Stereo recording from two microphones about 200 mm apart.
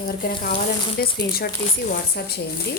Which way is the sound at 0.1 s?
45° left (ahead or behind).